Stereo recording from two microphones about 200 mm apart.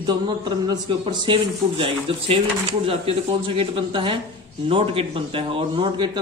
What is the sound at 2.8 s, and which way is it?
A man's voice, 25° right (ahead or behind).